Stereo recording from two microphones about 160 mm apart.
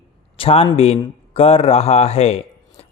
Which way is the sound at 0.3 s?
35° left (ahead or behind).